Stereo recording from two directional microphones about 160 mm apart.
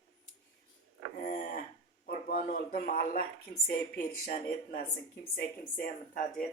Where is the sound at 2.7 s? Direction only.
65° left (ahead or behind).